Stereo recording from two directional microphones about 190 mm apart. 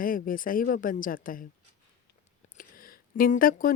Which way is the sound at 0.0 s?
45° left (ahead or behind).